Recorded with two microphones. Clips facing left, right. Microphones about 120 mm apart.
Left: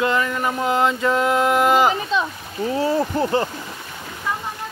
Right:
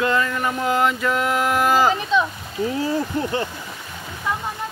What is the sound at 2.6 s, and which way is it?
Speech, 30° left (ahead or behind).